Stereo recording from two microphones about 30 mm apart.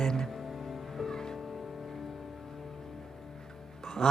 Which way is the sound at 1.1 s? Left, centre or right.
Centre.